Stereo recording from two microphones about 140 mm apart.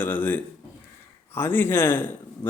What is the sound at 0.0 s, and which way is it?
A man's voice, 15° left (ahead or behind).